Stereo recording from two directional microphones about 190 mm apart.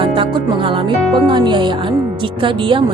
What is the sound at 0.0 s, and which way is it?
Music, 25° right (ahead or behind).